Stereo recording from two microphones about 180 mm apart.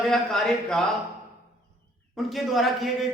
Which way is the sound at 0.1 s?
Centre (ahead or behind).